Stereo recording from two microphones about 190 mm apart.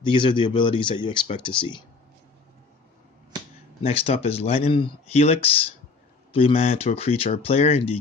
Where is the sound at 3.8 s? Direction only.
30° left (ahead or behind).